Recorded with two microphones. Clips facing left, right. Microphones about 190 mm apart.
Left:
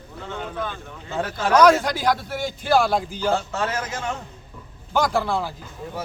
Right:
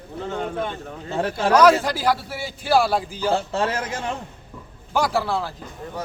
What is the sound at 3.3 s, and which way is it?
Speech, 30° right (ahead or behind).